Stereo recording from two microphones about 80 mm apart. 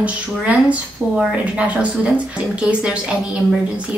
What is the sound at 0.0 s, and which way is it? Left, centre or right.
A woman's voice, centre.